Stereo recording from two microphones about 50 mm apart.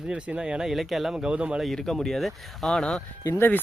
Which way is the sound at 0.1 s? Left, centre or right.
Centre.